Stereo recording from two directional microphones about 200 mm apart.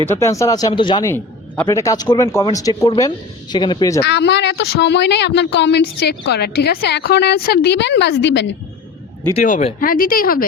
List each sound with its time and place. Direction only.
0.0 s speech: 10° left (ahead or behind)
1.0 s speech: 10° left (ahead or behind)
4.0 s speech: 60° left (ahead or behind)
9.3 s speech: 40° left (ahead or behind)